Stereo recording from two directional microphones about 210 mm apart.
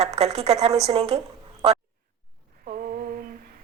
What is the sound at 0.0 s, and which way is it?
A woman's voice, 30° right (ahead or behind).